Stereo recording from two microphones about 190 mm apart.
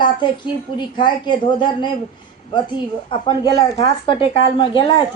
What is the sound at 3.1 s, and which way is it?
Speech, 25° left (ahead or behind).